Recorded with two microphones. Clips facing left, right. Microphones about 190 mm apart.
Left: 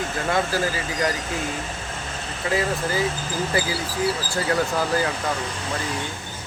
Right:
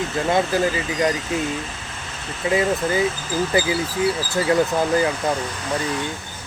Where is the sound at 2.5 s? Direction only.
20° right (ahead or behind).